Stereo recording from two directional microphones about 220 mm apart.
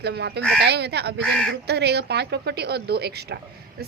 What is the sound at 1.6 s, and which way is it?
A woman's voice, 50° right (ahead or behind).